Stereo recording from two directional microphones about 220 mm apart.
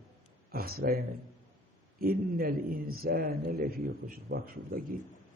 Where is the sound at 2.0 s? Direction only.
40° right (ahead or behind).